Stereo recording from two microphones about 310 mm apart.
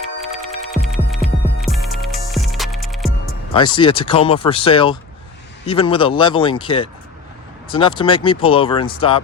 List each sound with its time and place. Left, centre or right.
0.2 s music: centre
3.5 s speech: centre